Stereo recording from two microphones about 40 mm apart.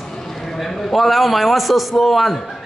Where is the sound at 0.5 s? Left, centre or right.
Centre.